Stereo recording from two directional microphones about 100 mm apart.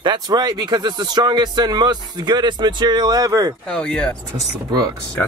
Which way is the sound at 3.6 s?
10° left (ahead or behind).